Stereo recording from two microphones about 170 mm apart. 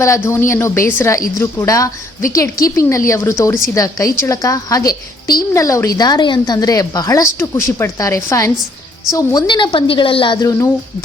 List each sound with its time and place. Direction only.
0.3 s a woman's voice: 15° left (ahead or behind)